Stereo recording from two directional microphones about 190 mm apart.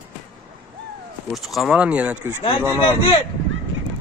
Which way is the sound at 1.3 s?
Centre (ahead or behind).